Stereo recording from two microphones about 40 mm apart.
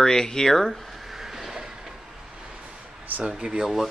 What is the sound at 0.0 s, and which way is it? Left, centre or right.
Speech, centre.